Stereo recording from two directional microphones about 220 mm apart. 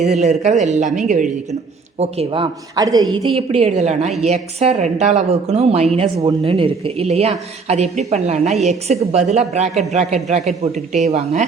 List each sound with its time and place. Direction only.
0.2 s a woman's voice: 30° right (ahead or behind)